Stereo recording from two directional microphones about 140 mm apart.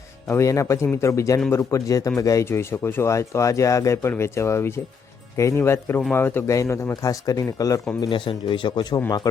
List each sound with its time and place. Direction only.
0.3 s speech: 20° left (ahead or behind)
8.0 s speech: 35° left (ahead or behind)